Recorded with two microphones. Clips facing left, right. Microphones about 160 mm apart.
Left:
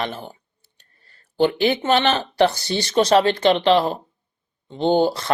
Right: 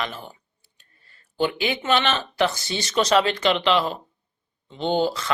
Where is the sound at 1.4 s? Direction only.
35° left (ahead or behind); by 2.2 s 50° left (ahead or behind).